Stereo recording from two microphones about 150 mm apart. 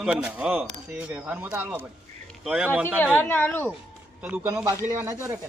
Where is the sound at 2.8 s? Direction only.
15° left (ahead or behind).